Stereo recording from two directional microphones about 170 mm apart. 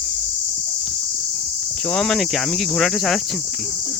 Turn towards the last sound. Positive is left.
turn(degrees=0)  # may be behind; listen again after turning